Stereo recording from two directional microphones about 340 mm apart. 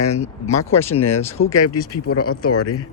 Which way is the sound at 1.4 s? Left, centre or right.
Left.